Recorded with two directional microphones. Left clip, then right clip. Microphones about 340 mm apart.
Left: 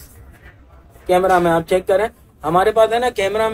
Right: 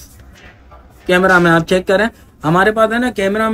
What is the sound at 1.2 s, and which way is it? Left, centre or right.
Speech, right.